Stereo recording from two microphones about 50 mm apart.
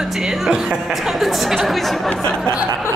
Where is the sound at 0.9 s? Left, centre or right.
Centre.